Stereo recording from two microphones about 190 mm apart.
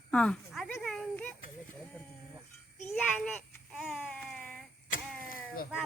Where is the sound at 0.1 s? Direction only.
5° left (ahead or behind).